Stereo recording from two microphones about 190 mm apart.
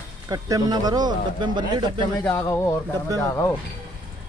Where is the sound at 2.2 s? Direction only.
15° left (ahead or behind).